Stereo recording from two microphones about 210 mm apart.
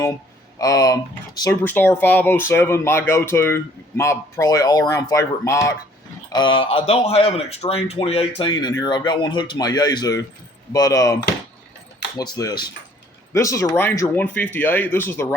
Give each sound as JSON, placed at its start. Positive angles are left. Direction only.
{"t": 0.6, "sound": "a man's voice", "side_deg": 15}